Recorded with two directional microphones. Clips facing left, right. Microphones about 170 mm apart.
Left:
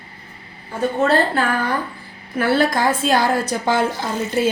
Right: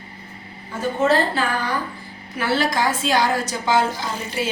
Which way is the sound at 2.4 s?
55° left (ahead or behind).